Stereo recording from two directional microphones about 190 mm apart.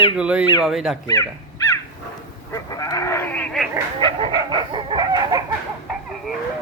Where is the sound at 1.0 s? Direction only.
20° left (ahead or behind).